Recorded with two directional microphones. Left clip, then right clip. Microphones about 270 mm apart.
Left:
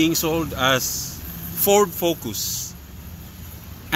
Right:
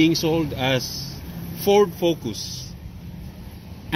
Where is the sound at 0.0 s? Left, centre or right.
Centre.